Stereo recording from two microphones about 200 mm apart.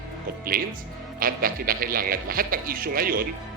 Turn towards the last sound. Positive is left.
turn(degrees=-45)  # may be behind; listen again after turning